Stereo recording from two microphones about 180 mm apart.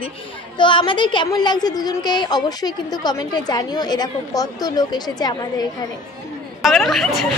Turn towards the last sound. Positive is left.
turn(degrees=0)  # may be behind; listen again after turning